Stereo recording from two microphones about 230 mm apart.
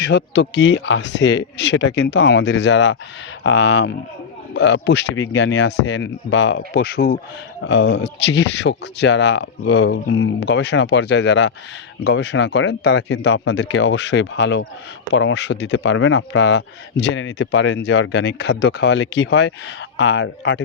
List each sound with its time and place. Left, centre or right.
0.1 s speech: left